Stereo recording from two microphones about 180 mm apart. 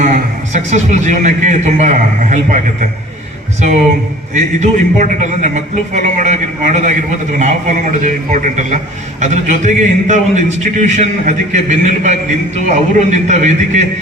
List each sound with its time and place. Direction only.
0.5 s a man's voice: 40° right (ahead or behind)
3.6 s a man's voice: 40° right (ahead or behind)